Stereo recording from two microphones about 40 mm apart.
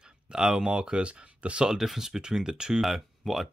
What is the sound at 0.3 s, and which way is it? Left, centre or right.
Speech, centre.